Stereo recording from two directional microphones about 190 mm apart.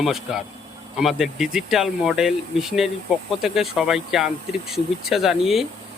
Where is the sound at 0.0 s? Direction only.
Centre (ahead or behind).